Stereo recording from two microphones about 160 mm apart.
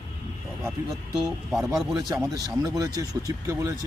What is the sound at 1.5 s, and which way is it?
Speech, centre (ahead or behind).